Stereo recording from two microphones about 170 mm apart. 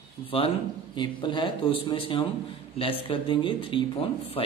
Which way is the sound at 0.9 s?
30° left (ahead or behind).